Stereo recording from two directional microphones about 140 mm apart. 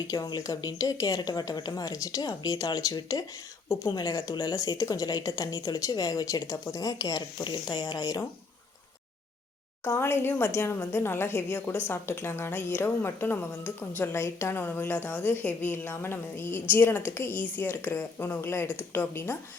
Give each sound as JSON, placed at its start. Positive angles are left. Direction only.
{"t": 0.1, "sound": "speech", "side_deg": 25}
{"t": 9.8, "sound": "speech", "side_deg": 20}